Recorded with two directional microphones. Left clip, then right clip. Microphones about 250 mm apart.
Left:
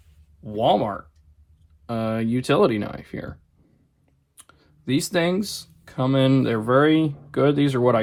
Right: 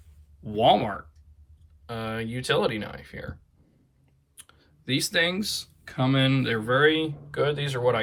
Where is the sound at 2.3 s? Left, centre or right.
Left.